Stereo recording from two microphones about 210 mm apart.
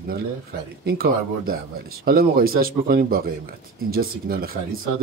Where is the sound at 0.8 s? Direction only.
45° right (ahead or behind).